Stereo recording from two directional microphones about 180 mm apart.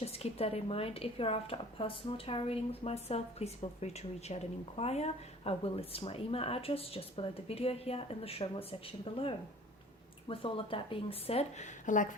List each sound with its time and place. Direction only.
0.0 s speech: 35° left (ahead or behind)